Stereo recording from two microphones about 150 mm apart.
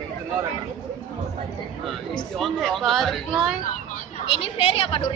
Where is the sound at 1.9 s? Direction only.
Centre (ahead or behind).